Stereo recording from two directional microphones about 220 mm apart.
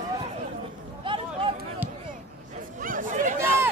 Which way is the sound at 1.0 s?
25° right (ahead or behind).